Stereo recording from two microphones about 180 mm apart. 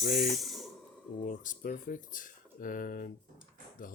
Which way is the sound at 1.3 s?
50° left (ahead or behind).